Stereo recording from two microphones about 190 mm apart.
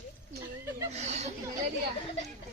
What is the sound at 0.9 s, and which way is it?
Speech, 35° right (ahead or behind).